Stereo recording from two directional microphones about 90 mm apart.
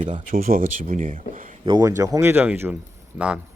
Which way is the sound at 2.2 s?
25° right (ahead or behind).